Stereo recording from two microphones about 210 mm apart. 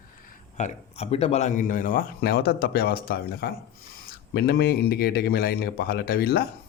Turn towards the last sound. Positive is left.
turn(degrees=45)  # may be behind; listen again after turning